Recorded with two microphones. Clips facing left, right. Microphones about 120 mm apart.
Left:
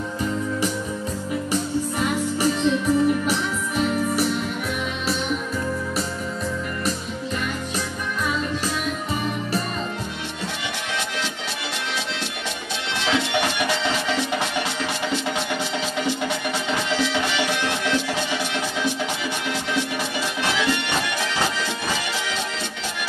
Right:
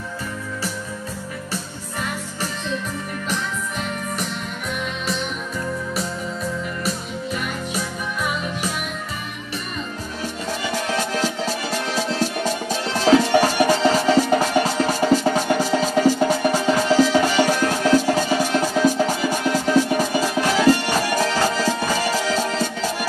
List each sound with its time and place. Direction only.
1.5 s music: 15° left (ahead or behind)
10.9 s music: 40° right (ahead or behind)